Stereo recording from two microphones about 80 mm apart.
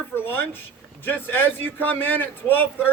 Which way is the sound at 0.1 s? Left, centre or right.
Left.